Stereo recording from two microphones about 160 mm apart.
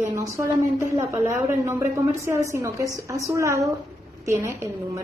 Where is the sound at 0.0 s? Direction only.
20° right (ahead or behind).